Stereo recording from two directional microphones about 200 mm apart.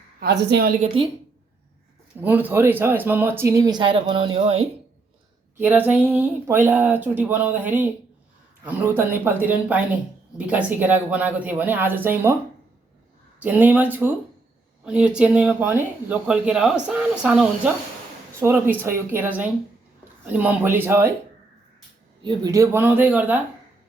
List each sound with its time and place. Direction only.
0.2 s a woman's voice: 55° right (ahead or behind)
2.2 s speech: 10° right (ahead or behind); by 4.6 s 25° right (ahead or behind)
5.5 s speech: 10° right (ahead or behind)
13.4 s speech: 10° right (ahead or behind)
22.2 s speech: 20° right (ahead or behind)